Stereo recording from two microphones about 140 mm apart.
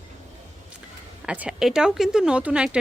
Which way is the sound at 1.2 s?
10° right (ahead or behind).